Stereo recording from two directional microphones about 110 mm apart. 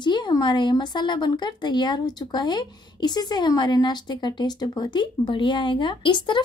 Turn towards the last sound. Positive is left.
turn(degrees=45)  # may be behind; listen again after turning